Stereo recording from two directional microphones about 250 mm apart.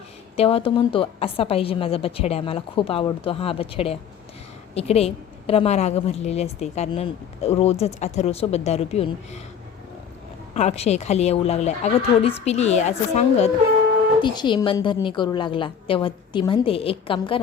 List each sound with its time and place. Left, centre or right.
0.3 s a woman's voice: left
10.5 s a woman's voice: left